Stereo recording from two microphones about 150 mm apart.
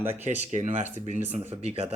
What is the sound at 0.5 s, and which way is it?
Speech, 50° right (ahead or behind).